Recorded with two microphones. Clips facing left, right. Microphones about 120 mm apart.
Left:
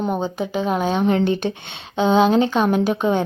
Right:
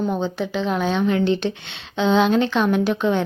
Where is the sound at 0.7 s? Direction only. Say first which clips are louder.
Left 1 dB; 40° left (ahead or behind).